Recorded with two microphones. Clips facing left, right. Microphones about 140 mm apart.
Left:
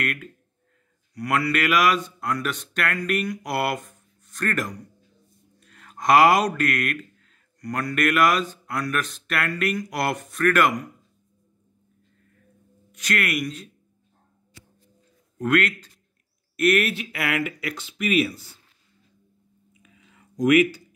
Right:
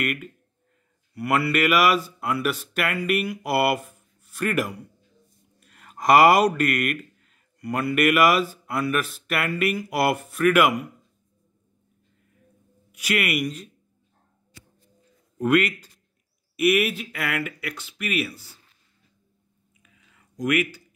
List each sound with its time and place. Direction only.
0.0 s speech: 5° right (ahead or behind)
12.9 s speech: 10° right (ahead or behind)
15.3 s a man's voice: 5° right (ahead or behind)
17.5 s speech: 15° left (ahead or behind)
20.4 s speech: 20° left (ahead or behind)